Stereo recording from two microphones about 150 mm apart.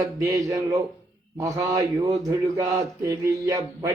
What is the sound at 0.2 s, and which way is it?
Mantra, 20° right (ahead or behind).